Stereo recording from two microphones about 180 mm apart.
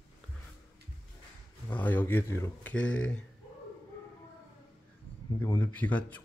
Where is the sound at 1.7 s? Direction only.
10° left (ahead or behind).